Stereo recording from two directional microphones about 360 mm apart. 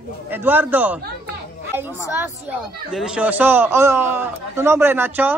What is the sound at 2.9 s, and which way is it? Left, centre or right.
A man's voice, centre.